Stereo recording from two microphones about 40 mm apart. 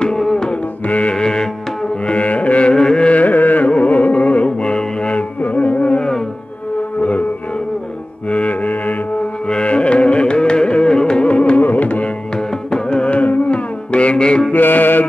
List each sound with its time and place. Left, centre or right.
0.2 s music: centre
0.5 s music: left
1.1 s music: centre
2.0 s music: left
2.7 s carnatic music: centre
3.1 s carnatic music: left
3.6 s music: left
8.3 s mantra: left
9.5 s carnatic music: left
11.2 s music: left
11.6 s music: left
12.4 s music: centre
13.0 s music: left
14.5 s mantra: left